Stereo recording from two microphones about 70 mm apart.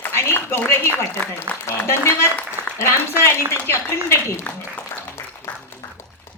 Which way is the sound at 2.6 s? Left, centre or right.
Right.